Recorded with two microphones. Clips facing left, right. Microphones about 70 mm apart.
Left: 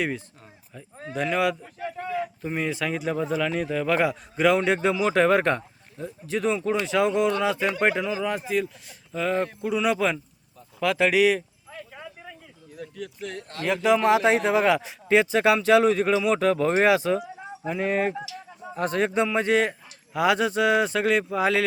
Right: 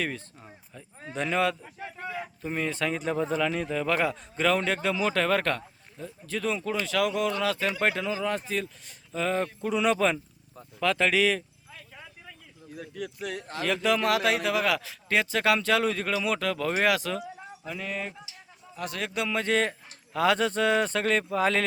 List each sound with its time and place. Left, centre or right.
0.7 s speech: centre
11.7 s clip-clop: left
12.7 s speech: centre
13.8 s a man's voice: left
19.3 s speech: centre